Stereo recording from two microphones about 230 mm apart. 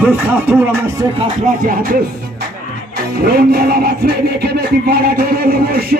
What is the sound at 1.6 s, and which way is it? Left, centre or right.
Music, right.